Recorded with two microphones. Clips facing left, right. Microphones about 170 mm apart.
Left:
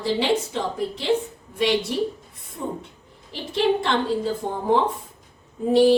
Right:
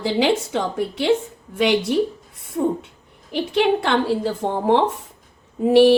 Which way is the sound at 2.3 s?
85° right.